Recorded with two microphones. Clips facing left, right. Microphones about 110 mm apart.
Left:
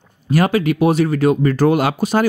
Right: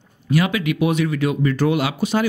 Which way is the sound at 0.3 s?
40° left (ahead or behind).